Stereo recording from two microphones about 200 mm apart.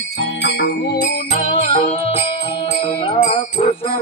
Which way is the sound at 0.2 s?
65° left (ahead or behind).